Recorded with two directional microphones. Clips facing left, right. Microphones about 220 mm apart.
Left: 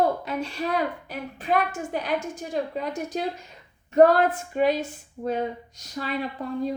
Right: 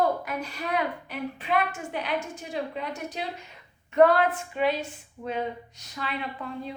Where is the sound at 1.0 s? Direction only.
40° left (ahead or behind).